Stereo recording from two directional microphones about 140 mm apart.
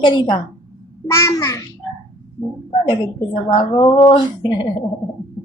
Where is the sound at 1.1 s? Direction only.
20° left (ahead or behind).